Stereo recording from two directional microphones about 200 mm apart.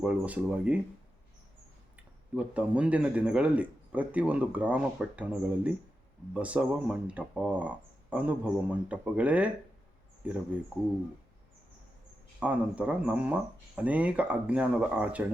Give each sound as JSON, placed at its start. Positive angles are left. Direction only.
{"t": 0.0, "sound": "speech", "side_deg": -5}
{"t": 2.3, "sound": "speech", "side_deg": -5}
{"t": 12.4, "sound": "speech", "side_deg": -5}